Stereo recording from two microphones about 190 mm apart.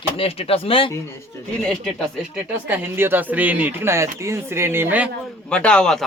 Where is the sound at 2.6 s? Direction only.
10° right (ahead or behind).